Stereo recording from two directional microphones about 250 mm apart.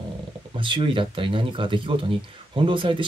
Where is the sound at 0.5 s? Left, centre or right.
Centre.